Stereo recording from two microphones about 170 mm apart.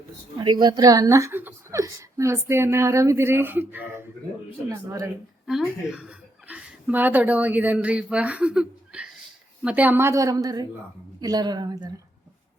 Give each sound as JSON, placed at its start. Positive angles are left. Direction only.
{"t": 0.4, "sound": "a woman's voice", "side_deg": -25}
{"t": 5.5, "sound": "a woman's voice", "side_deg": -5}